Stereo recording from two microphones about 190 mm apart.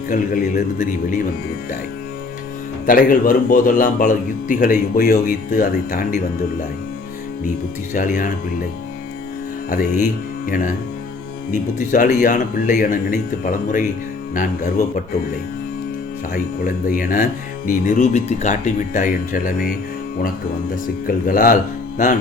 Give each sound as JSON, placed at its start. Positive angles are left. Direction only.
{"t": 0.1, "sound": "a man's voice", "side_deg": 45}
{"t": 2.8, "sound": "a man's voice", "side_deg": 45}
{"t": 7.9, "sound": "a man's voice", "side_deg": 45}
{"t": 10.4, "sound": "a man's voice", "side_deg": 45}
{"t": 11.8, "sound": "a man's voice", "side_deg": 40}
{"t": 16.3, "sound": "a man's voice", "side_deg": 45}
{"t": 21.1, "sound": "a man's voice", "side_deg": 45}